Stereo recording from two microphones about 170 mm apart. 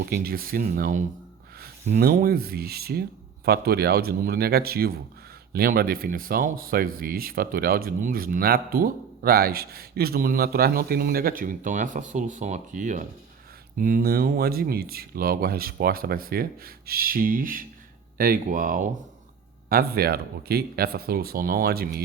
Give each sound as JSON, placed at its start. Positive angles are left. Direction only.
{"t": 0.0, "sound": "speech", "side_deg": -65}
{"t": 19.7, "sound": "speech", "side_deg": -65}